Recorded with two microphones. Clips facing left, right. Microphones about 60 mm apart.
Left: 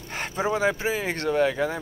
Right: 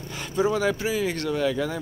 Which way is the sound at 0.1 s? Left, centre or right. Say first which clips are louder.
Right 2 dB; left.